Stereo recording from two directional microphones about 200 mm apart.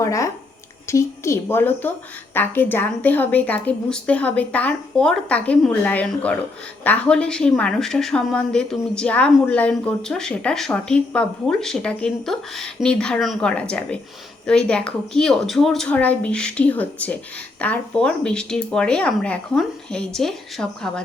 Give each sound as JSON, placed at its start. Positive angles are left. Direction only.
{"t": 0.0, "sound": "speech", "side_deg": 15}